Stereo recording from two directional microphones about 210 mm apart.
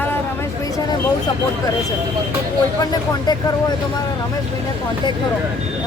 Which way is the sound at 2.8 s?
20° left (ahead or behind).